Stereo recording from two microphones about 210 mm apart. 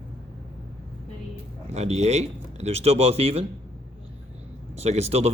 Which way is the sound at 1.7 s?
30° right (ahead or behind).